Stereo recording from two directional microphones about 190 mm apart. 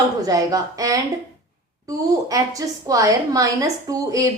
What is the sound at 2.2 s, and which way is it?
A woman's voice, 20° right (ahead or behind).